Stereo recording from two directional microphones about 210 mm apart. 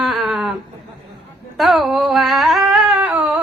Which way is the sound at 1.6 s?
Centre (ahead or behind).